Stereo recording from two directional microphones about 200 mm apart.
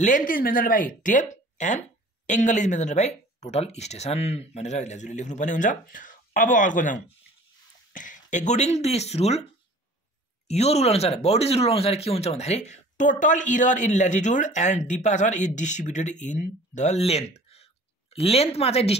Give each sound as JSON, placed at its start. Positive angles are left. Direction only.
{"t": 0.3, "sound": "speech", "side_deg": 45}
{"t": 10.5, "sound": "speech", "side_deg": 30}